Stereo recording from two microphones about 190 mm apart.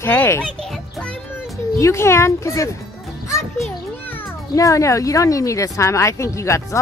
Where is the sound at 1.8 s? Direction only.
15° left (ahead or behind).